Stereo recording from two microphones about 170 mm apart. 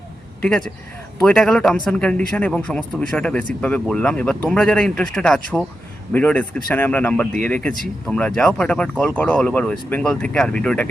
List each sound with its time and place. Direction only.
0.4 s a man's voice: 5° left (ahead or behind)